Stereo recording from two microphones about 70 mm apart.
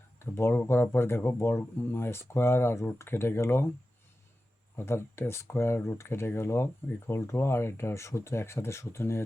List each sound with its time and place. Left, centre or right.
0.3 s speech: left
4.8 s speech: left